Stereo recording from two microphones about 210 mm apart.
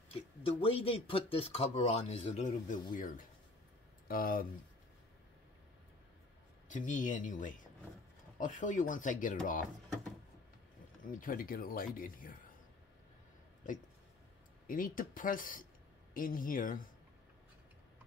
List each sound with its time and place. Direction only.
0.6 s speech: 30° left (ahead or behind); by 4.5 s 45° left (ahead or behind)
6.7 s speech: 35° left (ahead or behind)
11.1 s speech: 40° left (ahead or behind)
14.7 s speech: 40° left (ahead or behind)